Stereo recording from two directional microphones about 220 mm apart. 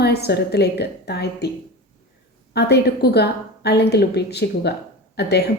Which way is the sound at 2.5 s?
50° left (ahead or behind).